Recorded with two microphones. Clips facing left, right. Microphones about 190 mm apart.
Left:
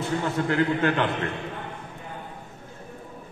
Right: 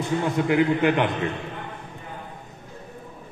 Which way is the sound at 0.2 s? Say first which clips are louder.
Right 4 dB; 15° right (ahead or behind).